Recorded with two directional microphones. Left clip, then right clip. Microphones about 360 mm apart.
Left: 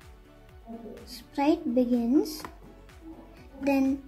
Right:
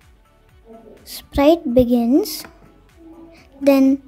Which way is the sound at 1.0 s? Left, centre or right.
Right.